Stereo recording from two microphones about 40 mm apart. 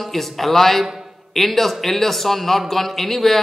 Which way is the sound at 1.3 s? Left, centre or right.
Centre.